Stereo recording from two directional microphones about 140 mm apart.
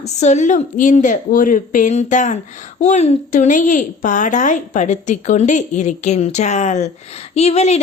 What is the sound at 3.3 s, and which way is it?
A woman's voice, 65° left (ahead or behind).